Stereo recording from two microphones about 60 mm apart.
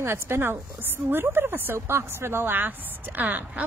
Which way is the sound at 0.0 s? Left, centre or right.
Right.